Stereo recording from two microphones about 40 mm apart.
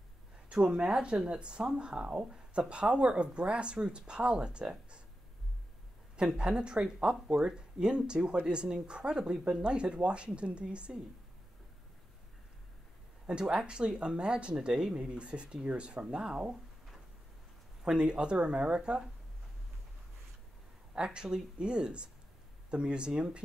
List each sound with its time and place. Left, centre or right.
0.5 s speech: right
6.1 s speech: right
13.3 s speech: right
14.5 s speech: centre
15.1 s speech: right
17.8 s speech: right
20.9 s speech: right